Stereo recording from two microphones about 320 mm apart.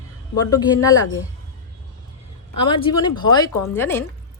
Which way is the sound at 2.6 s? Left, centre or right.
Centre.